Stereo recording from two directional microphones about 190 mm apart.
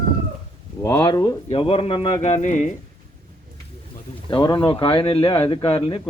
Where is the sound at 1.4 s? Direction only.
30° left (ahead or behind).